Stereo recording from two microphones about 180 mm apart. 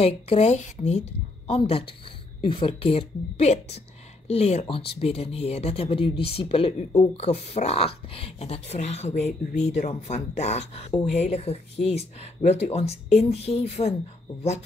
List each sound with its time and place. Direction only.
0.0 s speech: 35° left (ahead or behind)